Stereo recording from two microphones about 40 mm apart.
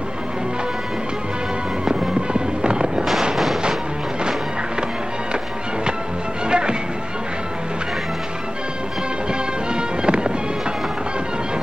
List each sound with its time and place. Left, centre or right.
1.9 s fireworks: right
6.5 s music: right
9.3 s music: right